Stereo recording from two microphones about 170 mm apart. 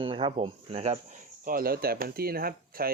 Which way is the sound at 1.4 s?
60° right (ahead or behind).